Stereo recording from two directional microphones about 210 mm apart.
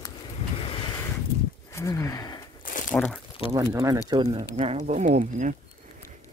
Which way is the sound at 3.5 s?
15° right (ahead or behind).